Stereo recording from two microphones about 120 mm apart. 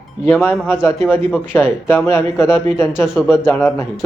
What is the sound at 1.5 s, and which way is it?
Speech, 15° left (ahead or behind).